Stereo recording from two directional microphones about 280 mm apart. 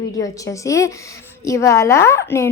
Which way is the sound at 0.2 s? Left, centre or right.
Centre.